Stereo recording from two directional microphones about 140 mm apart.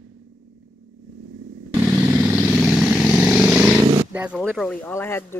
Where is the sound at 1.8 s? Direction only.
5° right (ahead or behind).